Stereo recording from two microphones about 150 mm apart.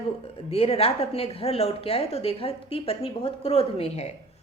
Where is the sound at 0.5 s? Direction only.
40° left (ahead or behind).